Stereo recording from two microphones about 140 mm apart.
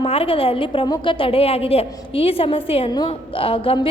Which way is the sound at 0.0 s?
40° left (ahead or behind).